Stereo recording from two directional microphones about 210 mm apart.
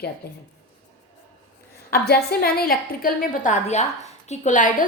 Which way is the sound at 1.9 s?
50° left (ahead or behind).